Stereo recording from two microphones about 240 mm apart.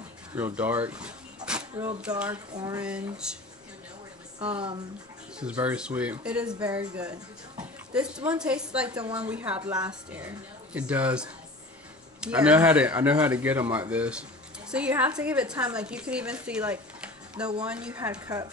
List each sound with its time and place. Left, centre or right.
0.4 s speech: centre
2.5 s a woman's voice: centre
2.8 s speech: centre
5.4 s speech: centre
9.8 s a woman's voice: centre
10.2 s a woman's voice: centre